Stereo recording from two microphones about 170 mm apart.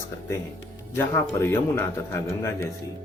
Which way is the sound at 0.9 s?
15° left (ahead or behind).